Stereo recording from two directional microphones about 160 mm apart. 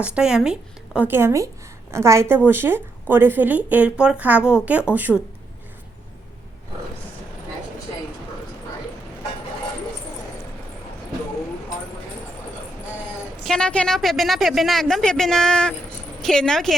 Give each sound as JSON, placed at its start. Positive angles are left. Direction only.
{"t": 0.0, "sound": "speech", "side_deg": -5}
{"t": 13.4, "sound": "a man's voice", "side_deg": 5}